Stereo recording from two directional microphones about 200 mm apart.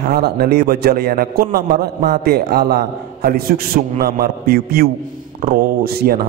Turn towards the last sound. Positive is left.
turn(degrees=-50)  # may be behind; listen again after turning